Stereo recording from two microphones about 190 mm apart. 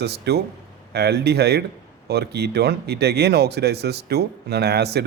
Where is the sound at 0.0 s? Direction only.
60° right (ahead or behind).